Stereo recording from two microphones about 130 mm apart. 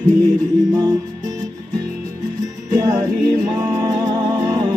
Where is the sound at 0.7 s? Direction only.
30° right (ahead or behind).